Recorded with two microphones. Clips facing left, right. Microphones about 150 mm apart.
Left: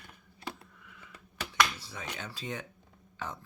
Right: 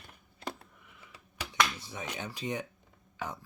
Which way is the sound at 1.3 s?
20° right (ahead or behind).